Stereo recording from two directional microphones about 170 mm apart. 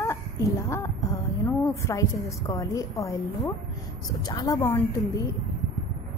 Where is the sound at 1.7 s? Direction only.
20° left (ahead or behind).